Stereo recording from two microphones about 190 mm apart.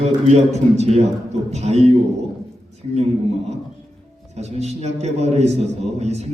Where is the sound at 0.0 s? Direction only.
35° right (ahead or behind).